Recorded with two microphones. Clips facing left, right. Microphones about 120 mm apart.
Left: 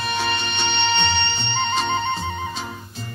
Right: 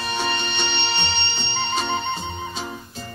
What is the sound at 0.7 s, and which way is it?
Music, 40° left (ahead or behind).